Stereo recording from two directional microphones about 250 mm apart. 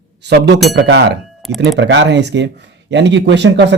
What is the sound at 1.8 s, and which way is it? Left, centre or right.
Speech, right.